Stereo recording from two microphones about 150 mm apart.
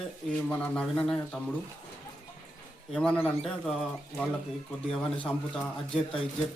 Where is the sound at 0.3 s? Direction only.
10° left (ahead or behind).